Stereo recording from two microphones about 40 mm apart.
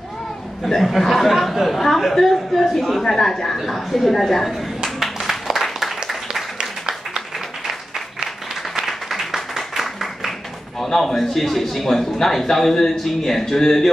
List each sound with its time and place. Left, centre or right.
0.7 s a man's voice: centre
4.6 s a sound: centre
6.6 s applause: centre
8.8 s applause: centre
10.8 s a man's voice: centre